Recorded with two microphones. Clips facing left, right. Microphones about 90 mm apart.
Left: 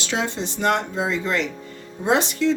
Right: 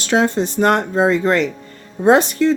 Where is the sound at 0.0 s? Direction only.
50° right (ahead or behind).